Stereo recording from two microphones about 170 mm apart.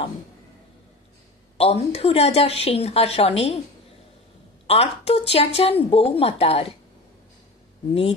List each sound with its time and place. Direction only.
1.6 s a woman's voice: 35° left (ahead or behind)
4.6 s a woman's voice: 35° left (ahead or behind)